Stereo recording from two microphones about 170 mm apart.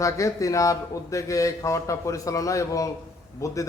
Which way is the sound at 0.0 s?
20° left (ahead or behind).